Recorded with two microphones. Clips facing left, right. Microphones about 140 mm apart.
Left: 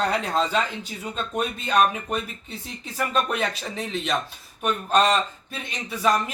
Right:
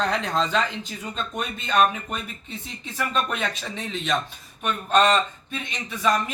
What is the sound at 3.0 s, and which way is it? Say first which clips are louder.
Speech: left 2 dB; 40° left (ahead or behind).